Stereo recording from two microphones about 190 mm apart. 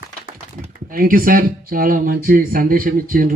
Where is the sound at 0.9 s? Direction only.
50° right (ahead or behind).